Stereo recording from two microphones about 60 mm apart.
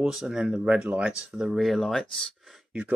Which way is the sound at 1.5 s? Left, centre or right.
Centre.